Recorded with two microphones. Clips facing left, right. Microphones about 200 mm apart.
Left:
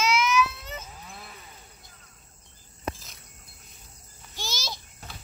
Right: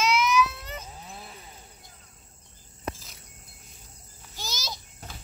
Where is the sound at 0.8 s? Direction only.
30° right (ahead or behind).